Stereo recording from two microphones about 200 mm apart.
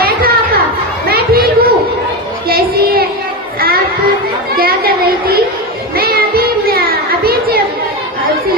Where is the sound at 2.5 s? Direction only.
50° right (ahead or behind).